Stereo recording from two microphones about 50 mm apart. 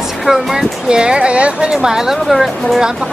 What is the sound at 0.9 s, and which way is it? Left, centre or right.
Speech, centre.